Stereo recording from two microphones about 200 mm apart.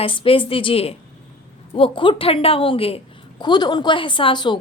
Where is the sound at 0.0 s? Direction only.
25° left (ahead or behind).